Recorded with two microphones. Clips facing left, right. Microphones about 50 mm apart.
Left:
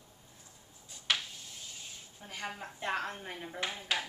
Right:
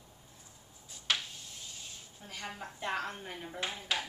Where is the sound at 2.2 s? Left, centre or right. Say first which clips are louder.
Left 2 dB; centre.